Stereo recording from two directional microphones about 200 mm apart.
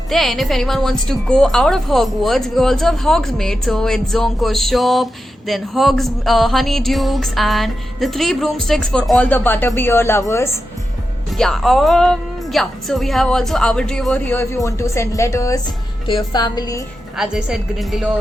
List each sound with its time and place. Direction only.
0.1 s music: centre (ahead or behind)
11.3 s music: centre (ahead or behind)
16.0 s a woman's voice: 25° left (ahead or behind)
17.2 s music: centre (ahead or behind)